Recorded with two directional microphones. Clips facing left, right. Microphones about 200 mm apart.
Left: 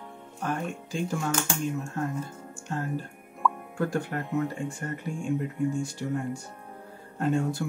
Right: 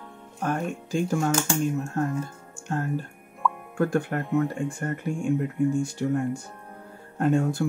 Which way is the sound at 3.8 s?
50° right (ahead or behind).